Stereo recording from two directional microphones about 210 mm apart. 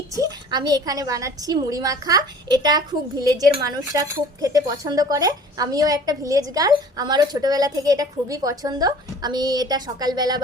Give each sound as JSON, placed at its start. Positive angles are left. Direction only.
{"t": 0.1, "sound": "a woman's voice", "side_deg": -15}